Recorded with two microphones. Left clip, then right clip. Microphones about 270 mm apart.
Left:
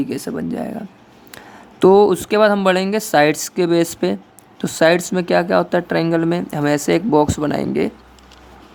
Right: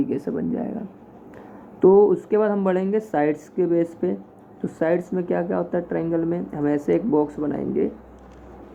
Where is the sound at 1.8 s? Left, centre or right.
Left.